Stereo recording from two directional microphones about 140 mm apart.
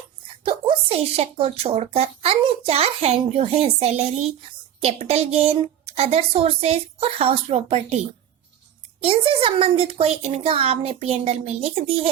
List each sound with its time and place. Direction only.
0.4 s speech: 40° right (ahead or behind)
9.0 s speech: 40° right (ahead or behind)